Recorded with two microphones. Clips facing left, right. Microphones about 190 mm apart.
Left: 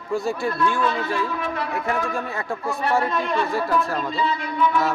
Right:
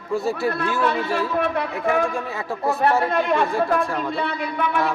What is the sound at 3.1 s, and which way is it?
Speech, 60° right (ahead or behind).